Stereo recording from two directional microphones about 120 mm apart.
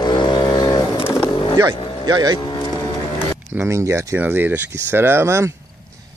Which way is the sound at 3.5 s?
20° right (ahead or behind).